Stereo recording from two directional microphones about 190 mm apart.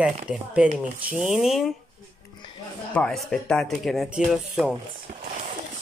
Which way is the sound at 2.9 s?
5° left (ahead or behind).